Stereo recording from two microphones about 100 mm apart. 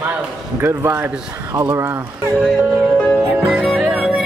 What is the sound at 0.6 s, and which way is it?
A man's voice, 30° right (ahead or behind).